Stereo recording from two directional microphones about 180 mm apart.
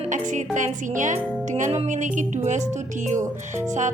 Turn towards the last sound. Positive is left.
turn(degrees=-40)  # may be behind; listen again after turning